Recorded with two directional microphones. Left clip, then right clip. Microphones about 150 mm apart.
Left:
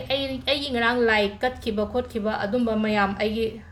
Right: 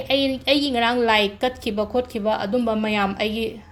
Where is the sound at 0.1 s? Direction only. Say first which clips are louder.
Right 5 dB; 40° right (ahead or behind).